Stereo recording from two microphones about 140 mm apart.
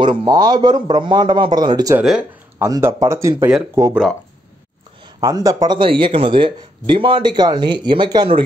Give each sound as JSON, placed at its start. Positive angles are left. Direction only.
{"t": 0.0, "sound": "speech", "side_deg": -35}
{"t": 2.0, "sound": "speech", "side_deg": -5}
{"t": 2.6, "sound": "speech", "side_deg": -20}
{"t": 5.2, "sound": "speech", "side_deg": -25}
{"t": 5.8, "sound": "speech", "side_deg": -35}